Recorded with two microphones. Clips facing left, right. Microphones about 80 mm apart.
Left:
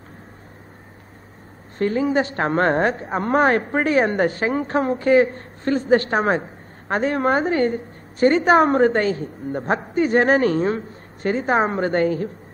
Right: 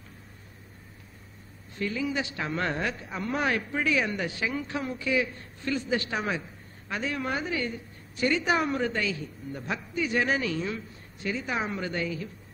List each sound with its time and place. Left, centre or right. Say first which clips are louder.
1.8 s a woman's voice: left 10 dB; left